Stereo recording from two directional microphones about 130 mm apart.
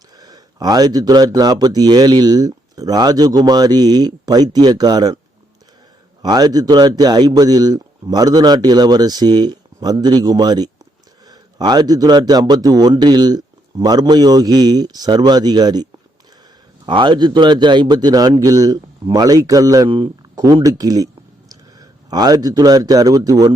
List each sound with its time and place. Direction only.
0.2 s speech: 30° right (ahead or behind)
6.2 s a man's voice: 30° right (ahead or behind)